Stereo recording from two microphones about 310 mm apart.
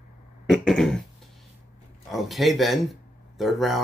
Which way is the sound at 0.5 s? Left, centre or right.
Centre.